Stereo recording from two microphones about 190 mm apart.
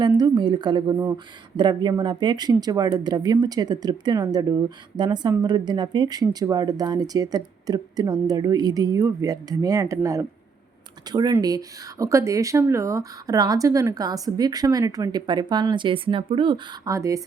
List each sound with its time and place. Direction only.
0.2 s speech: 25° right (ahead or behind)